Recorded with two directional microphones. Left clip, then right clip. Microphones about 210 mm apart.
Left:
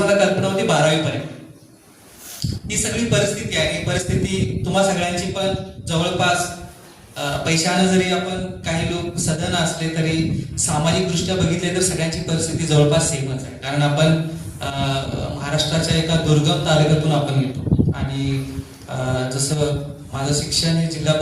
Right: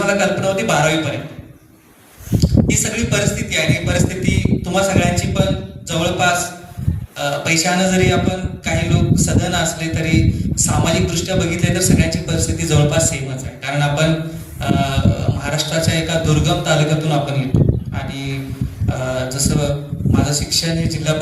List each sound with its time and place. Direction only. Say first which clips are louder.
0.0 s a sound: even; 35° right (ahead or behind)
2.4 s a man's voice: right 7 dB; 35° right (ahead or behind)
19.1 s a man's voice: right 2 dB; 35° right (ahead or behind)